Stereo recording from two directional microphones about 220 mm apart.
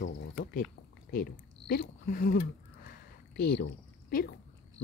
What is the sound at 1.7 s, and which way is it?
Speech, 45° left (ahead or behind).